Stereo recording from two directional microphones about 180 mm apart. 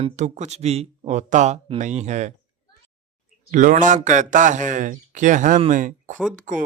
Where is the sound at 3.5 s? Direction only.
45° right (ahead or behind).